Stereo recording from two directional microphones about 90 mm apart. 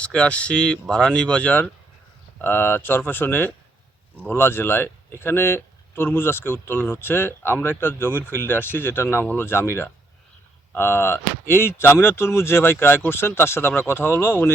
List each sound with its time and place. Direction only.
0.0 s speech: 15° left (ahead or behind)